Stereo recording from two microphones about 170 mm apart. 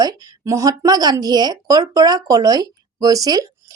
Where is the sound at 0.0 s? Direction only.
20° right (ahead or behind).